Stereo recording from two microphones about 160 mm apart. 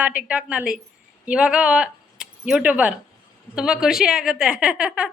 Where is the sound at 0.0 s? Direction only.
10° right (ahead or behind).